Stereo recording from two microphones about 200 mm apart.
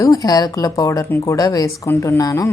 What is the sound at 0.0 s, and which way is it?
Speech, 15° left (ahead or behind).